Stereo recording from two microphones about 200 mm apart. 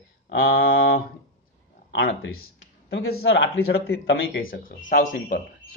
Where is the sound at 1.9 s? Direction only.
65° left (ahead or behind).